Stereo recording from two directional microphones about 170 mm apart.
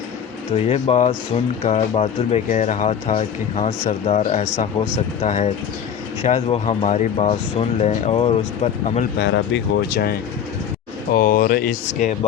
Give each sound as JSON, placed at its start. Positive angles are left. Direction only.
{"t": 0.5, "sound": "speech", "side_deg": 35}
{"t": 9.1, "sound": "speech", "side_deg": 90}
{"t": 11.1, "sound": "speech", "side_deg": 55}